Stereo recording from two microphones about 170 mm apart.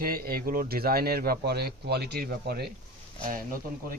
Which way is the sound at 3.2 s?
55° right (ahead or behind).